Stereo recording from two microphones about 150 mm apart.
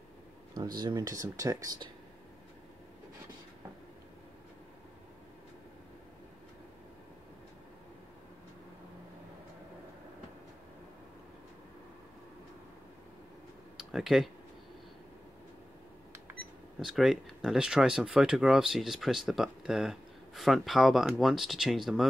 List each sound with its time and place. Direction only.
0.7 s speech: 25° right (ahead or behind)
13.7 s speech: centre (ahead or behind)
16.8 s speech: centre (ahead or behind)